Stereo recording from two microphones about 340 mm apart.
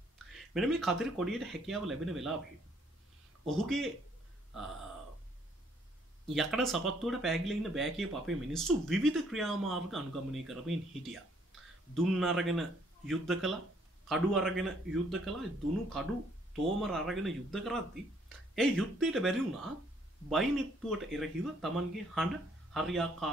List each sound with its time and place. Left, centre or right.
0.5 s speech: centre
3.4 s speech: centre
6.2 s speech: centre